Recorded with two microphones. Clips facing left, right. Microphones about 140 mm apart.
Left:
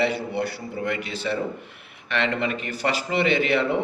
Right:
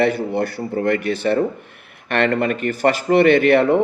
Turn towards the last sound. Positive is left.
turn(degrees=-55)  # may be behind; listen again after turning